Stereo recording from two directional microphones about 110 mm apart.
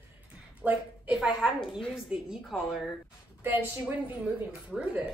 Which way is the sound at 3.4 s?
15° right (ahead or behind).